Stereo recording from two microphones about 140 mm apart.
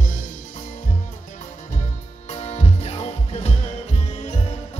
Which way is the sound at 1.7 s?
55° left (ahead or behind).